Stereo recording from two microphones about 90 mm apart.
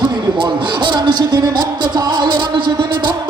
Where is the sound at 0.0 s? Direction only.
60° right (ahead or behind).